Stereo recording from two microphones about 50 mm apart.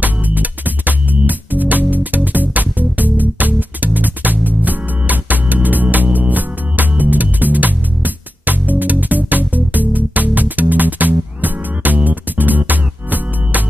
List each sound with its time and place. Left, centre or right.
0.0 s music: right